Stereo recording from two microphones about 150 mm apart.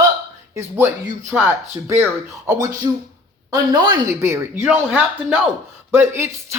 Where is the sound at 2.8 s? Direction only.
25° right (ahead or behind).